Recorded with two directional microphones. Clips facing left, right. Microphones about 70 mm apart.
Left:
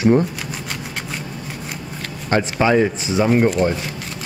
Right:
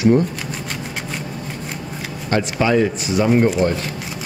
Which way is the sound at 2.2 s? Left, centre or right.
Left.